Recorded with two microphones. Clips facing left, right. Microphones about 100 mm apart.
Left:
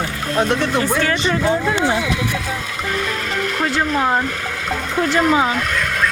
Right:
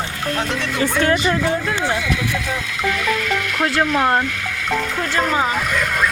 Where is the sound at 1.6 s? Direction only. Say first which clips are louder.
Left 3 dB; 20° left (ahead or behind).